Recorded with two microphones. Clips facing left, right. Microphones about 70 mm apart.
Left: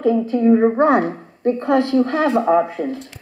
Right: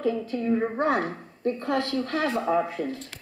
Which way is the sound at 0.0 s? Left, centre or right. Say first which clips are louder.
Left 11 dB; left.